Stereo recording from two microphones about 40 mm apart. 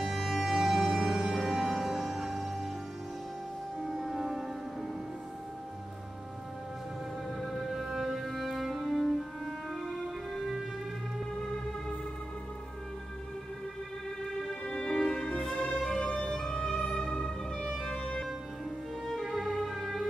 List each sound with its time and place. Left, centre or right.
0.2 s music: centre
3.9 s music: centre
7.4 s music: centre
10.3 s music: centre
14.5 s music: left
19.2 s music: centre